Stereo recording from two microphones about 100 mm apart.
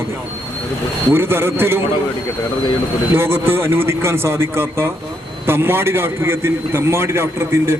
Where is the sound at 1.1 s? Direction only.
25° right (ahead or behind).